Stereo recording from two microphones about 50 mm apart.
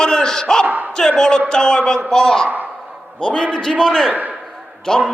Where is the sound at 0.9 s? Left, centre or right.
Centre.